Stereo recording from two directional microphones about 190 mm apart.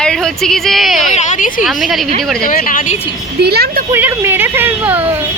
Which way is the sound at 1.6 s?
Centre (ahead or behind).